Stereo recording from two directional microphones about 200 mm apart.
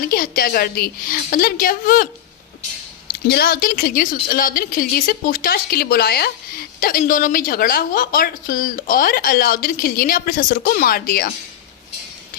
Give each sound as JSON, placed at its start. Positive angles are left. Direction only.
{"t": 0.1, "sound": "a woman's voice", "side_deg": 45}
{"t": 3.1, "sound": "a woman's voice", "side_deg": 50}